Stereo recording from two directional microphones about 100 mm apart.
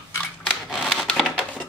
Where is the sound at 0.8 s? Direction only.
10° left (ahead or behind).